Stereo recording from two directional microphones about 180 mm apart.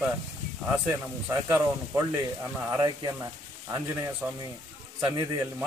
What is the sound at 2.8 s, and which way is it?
Speech, 20° right (ahead or behind).